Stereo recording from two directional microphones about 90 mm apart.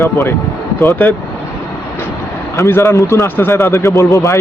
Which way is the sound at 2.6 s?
30° left (ahead or behind).